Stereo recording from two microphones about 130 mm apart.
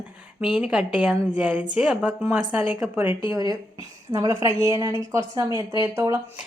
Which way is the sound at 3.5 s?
30° right (ahead or behind).